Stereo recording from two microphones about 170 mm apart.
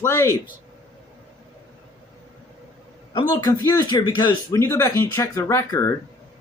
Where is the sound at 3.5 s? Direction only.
20° left (ahead or behind).